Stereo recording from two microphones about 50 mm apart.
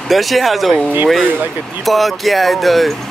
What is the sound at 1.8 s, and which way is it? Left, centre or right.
Speech, centre.